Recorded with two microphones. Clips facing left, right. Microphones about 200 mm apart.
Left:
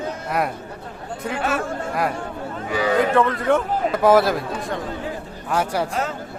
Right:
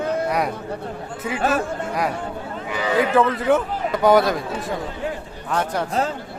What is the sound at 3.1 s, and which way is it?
A man's voice, centre (ahead or behind).